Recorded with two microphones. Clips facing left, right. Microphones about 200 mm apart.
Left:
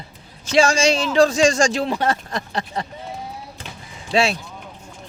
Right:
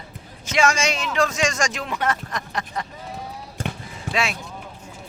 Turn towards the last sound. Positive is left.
turn(degrees=30)  # may be behind; listen again after turning